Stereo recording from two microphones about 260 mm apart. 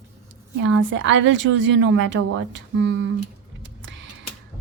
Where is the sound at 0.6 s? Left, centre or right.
Right.